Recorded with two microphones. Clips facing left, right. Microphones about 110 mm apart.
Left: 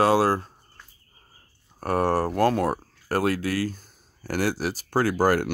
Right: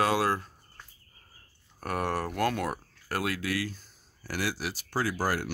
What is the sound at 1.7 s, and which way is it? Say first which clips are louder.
Speech: left 8 dB; 35° left (ahead or behind).